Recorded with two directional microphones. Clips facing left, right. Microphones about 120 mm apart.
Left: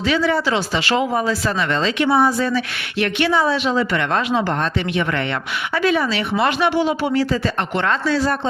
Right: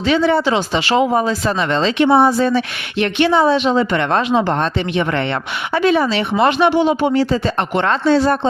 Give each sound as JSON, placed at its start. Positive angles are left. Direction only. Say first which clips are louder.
{"t": 0.0, "sound": "speech", "louder": "right 4 dB", "side_deg": -30}